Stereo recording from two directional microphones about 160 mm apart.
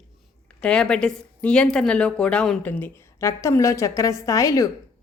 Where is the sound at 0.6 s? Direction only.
5° left (ahead or behind).